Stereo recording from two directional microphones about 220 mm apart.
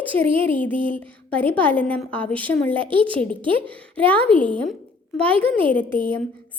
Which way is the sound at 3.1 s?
5° left (ahead or behind).